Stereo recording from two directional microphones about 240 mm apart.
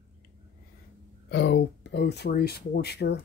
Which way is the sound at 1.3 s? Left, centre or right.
Left.